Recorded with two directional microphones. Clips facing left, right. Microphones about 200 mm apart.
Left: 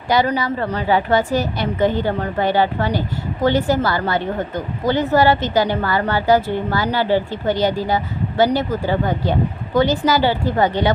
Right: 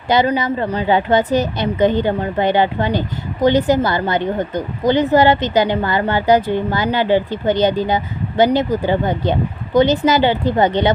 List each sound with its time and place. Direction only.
0.1 s a woman's voice: 20° right (ahead or behind)